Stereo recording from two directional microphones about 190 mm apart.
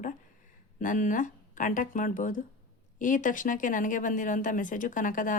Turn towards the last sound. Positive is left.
turn(degrees=45)  # may be behind; listen again after turning